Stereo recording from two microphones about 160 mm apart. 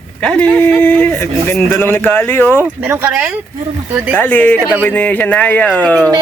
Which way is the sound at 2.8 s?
10° right (ahead or behind).